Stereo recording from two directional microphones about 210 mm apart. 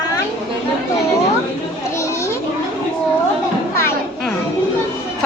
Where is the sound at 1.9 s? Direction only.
15° left (ahead or behind).